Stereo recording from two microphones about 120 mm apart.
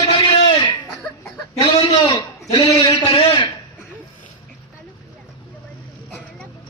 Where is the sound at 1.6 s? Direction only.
50° left (ahead or behind).